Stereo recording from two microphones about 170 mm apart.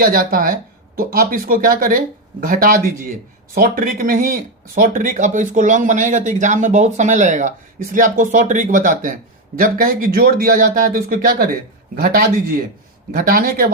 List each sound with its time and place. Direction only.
0.0 s speech: 55° right (ahead or behind)